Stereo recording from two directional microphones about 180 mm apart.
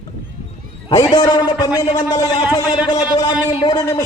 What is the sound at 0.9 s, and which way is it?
A man's voice, 20° left (ahead or behind).